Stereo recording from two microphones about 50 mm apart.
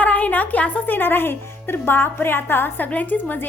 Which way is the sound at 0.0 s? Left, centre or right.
Left.